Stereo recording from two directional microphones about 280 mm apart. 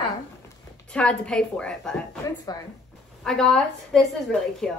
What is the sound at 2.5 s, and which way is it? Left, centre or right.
Speech, centre.